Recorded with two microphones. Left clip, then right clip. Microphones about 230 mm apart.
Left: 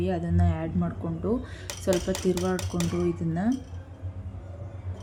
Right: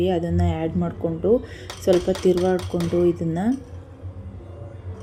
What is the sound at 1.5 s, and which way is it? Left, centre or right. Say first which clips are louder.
A woman's voice: right 7 dB; centre.